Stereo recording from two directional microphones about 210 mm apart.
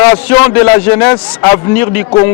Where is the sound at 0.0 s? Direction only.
15° left (ahead or behind).